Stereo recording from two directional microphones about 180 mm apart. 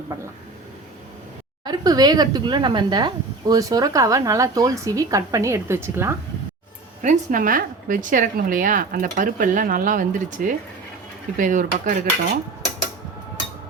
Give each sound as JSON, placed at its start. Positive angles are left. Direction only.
{"t": 1.6, "sound": "speech", "side_deg": -20}
{"t": 7.0, "sound": "a woman's voice", "side_deg": -45}